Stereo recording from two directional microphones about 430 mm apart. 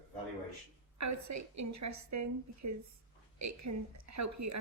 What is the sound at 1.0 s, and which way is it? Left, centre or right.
A woman's voice, right.